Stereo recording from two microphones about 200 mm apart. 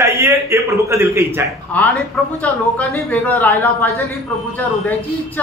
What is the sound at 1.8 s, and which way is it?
Speech, 5° left (ahead or behind).